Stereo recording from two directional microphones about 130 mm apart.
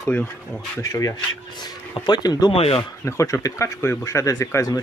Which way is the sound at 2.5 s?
50° left (ahead or behind).